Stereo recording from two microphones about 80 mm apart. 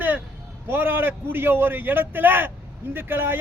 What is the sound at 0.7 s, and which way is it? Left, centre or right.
A man's voice, right.